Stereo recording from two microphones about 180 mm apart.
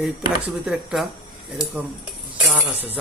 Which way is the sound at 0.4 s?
5° right (ahead or behind).